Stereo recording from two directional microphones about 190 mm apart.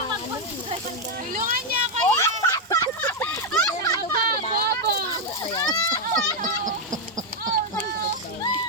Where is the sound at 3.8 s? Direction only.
15° left (ahead or behind).